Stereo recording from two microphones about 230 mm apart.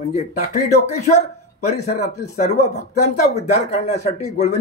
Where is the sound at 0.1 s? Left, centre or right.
Left.